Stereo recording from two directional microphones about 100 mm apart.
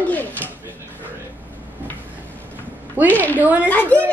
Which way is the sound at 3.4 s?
15° right (ahead or behind).